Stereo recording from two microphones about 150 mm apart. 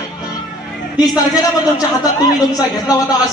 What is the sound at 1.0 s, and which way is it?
A man's voice, 25° left (ahead or behind).